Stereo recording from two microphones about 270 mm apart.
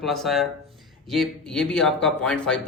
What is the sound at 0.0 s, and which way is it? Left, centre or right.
A man's voice, centre.